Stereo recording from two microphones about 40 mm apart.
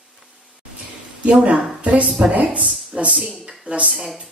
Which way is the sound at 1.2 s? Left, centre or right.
Right.